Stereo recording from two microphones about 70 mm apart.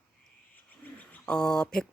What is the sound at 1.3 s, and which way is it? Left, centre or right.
Speech, centre.